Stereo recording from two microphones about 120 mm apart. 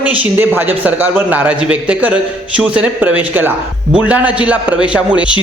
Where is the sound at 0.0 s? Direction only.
15° right (ahead or behind).